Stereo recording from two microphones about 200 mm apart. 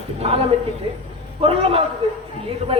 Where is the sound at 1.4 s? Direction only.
30° right (ahead or behind).